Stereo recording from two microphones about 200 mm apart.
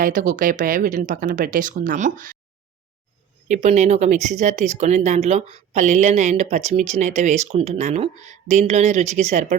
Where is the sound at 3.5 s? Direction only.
35° right (ahead or behind).